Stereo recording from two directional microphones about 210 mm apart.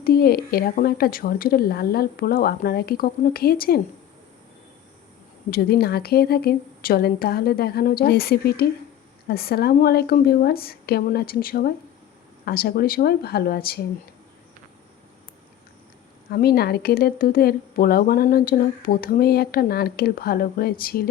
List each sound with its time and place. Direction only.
0.0 s speech: 45° left (ahead or behind)
5.5 s speech: 45° left (ahead or behind)
16.3 s speech: 45° left (ahead or behind)